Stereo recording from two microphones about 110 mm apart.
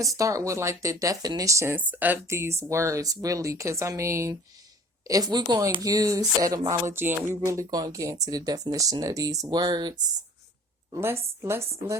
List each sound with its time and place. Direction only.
0.0 s speech: 30° right (ahead or behind)
5.0 s a sound: 35° right (ahead or behind)
10.9 s speech: 25° right (ahead or behind)